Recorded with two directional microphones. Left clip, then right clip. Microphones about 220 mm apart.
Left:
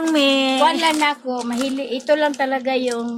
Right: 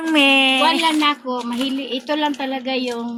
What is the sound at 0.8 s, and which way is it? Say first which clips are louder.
Speech: even; 35° left (ahead or behind).